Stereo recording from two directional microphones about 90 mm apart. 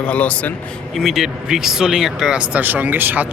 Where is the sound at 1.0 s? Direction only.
5° right (ahead or behind).